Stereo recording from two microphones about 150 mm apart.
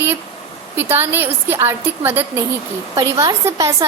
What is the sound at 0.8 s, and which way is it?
A woman's voice, 15° right (ahead or behind).